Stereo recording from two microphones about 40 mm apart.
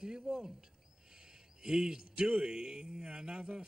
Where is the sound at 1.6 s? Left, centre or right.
Centre.